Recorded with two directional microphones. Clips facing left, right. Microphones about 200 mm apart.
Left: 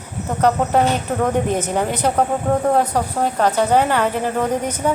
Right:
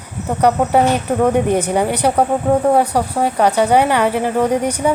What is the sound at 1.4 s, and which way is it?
Speech, 10° right (ahead or behind).